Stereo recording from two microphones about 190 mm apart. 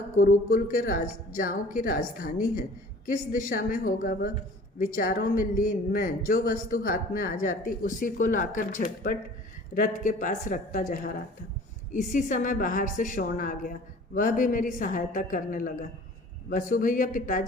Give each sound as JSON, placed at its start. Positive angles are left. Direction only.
{"t": 0.2, "sound": "a man's voice", "side_deg": 45}